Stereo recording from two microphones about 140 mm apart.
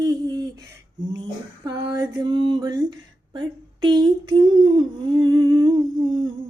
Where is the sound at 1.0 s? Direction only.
30° right (ahead or behind).